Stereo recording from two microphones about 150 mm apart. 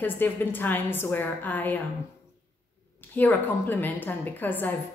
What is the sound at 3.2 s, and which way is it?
A woman's voice, 10° left (ahead or behind).